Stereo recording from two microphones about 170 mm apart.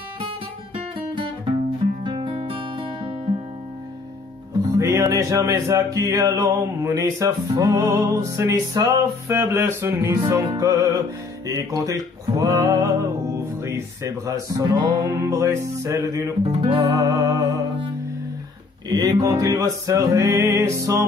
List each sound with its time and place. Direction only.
2.0 s music: 30° right (ahead or behind)
4.7 s music: 20° right (ahead or behind)
18.9 s music: 25° right (ahead or behind)